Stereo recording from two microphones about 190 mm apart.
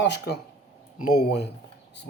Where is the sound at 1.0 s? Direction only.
50° left (ahead or behind).